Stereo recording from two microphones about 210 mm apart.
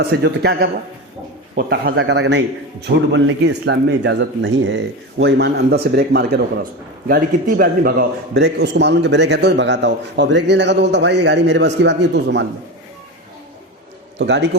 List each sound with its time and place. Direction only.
0.0 s a man's voice: 50° right (ahead or behind)
14.2 s a man's voice: 55° right (ahead or behind)